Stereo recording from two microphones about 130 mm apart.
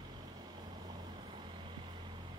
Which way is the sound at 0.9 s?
40° right (ahead or behind).